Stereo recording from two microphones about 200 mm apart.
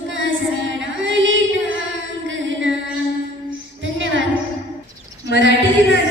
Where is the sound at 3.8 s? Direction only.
70° right (ahead or behind).